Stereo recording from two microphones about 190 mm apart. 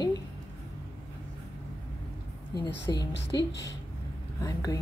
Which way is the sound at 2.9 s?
20° left (ahead or behind).